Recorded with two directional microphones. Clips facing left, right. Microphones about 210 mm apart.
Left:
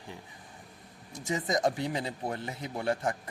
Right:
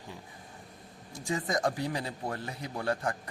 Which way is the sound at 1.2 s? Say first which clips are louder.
Left 2 dB; 20° left (ahead or behind).